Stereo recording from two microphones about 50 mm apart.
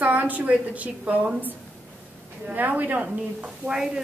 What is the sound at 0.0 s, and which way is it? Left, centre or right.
A woman's voice, right.